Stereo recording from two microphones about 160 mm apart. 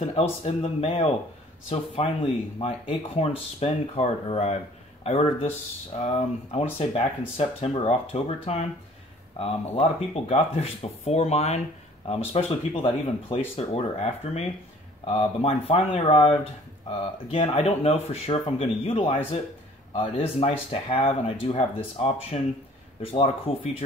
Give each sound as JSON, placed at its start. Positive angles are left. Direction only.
{"t": 0.0, "sound": "speech", "side_deg": 35}